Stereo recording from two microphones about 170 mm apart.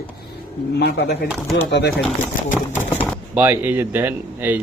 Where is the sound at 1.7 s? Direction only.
90° left.